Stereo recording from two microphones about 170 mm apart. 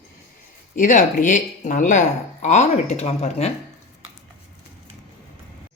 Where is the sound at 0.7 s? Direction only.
50° left (ahead or behind).